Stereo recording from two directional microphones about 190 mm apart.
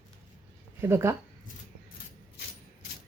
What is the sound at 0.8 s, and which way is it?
Speech, 15° right (ahead or behind).